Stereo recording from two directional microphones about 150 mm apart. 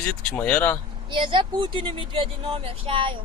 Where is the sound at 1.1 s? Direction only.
35° right (ahead or behind).